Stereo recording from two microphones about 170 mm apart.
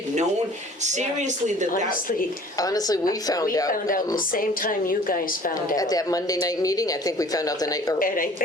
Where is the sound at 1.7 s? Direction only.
55° left (ahead or behind).